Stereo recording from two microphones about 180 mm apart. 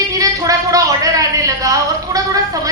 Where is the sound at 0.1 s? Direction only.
20° right (ahead or behind).